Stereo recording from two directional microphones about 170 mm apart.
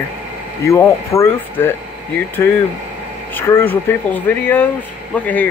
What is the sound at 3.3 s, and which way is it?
Speech, 15° left (ahead or behind).